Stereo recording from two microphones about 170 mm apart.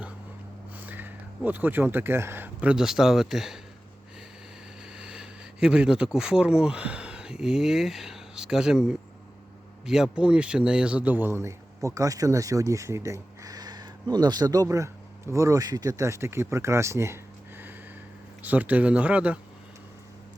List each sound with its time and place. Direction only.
0.8 s a sound: 10° right (ahead or behind)
1.5 s speech: 10° right (ahead or behind)
4.9 s speech: 5° right (ahead or behind)
18.4 s speech: 10° right (ahead or behind)